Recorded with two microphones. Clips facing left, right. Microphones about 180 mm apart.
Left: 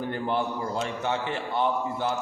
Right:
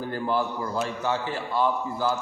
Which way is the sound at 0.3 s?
25° left (ahead or behind).